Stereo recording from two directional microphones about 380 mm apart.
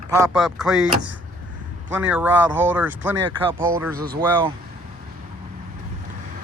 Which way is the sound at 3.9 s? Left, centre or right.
Right.